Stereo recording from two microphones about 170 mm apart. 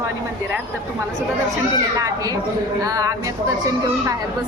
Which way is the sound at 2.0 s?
20° right (ahead or behind).